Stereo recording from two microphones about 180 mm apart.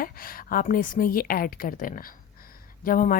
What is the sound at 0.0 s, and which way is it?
A woman's voice, 55° left (ahead or behind).